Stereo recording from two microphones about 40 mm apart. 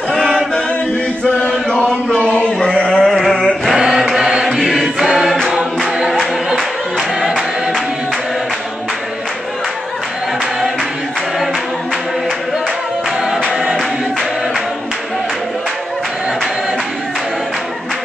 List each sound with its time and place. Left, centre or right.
0.1 s chant: centre
1.8 s music: centre
2.6 s a sound: left
3.1 s a sound: centre
3.7 s choir: centre
4.5 s choir: centre
5.9 s music: centre
6.5 s music: centre